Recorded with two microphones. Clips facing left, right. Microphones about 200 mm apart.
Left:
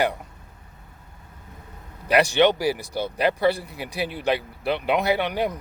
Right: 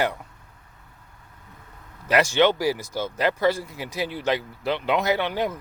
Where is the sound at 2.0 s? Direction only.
15° left (ahead or behind).